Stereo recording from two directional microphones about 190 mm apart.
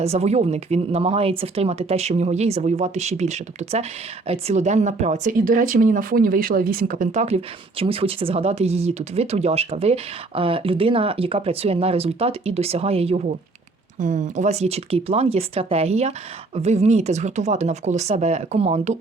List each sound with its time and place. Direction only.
0.0 s speech: 35° right (ahead or behind)